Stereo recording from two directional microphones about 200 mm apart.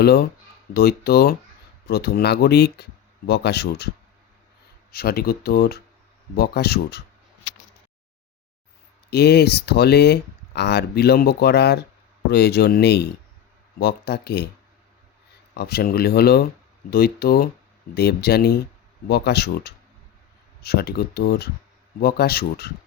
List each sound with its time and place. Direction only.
0.0 s speech: 55° left (ahead or behind)
4.9 s speech: 50° left (ahead or behind)
9.0 s speech: 55° left (ahead or behind)
15.5 s speech: 50° left (ahead or behind)